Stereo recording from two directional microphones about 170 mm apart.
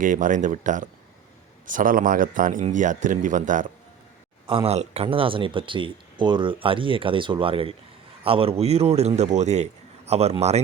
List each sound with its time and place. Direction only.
0.0 s speech: 50° right (ahead or behind)
4.4 s speech: 35° right (ahead or behind)